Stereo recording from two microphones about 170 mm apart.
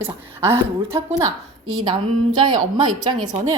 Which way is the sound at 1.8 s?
25° right (ahead or behind).